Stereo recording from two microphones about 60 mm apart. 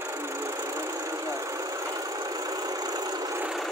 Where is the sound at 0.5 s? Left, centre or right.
Right.